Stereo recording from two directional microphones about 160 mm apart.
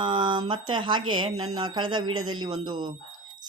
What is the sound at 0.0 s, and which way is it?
Speech, 30° right (ahead or behind).